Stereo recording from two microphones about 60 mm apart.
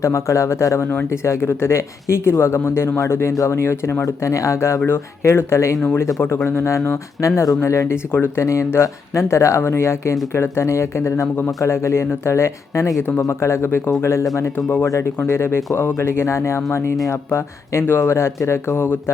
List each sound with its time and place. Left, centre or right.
0.0 s a man's voice: left
8.1 s speech: left
8.4 s speech: left